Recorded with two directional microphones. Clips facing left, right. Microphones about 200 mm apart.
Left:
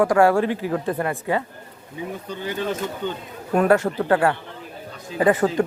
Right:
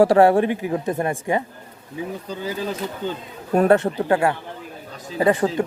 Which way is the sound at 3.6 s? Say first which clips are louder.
Right 1 dB; 25° right (ahead or behind).